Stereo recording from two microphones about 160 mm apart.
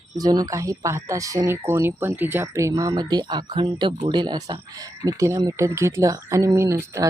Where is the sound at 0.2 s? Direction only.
25° right (ahead or behind).